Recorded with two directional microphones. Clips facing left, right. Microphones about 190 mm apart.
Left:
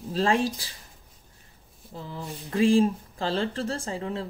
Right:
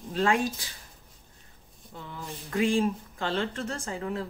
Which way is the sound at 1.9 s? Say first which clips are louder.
Left 3 dB; 35° left (ahead or behind).